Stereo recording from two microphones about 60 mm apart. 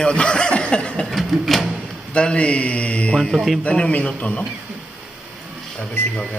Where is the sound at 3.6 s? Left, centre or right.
Left.